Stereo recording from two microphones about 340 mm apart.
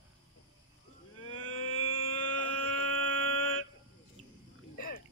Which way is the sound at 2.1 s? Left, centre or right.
Left.